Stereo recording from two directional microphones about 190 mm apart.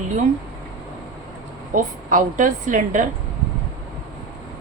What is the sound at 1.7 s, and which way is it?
A woman's voice, 45° right (ahead or behind).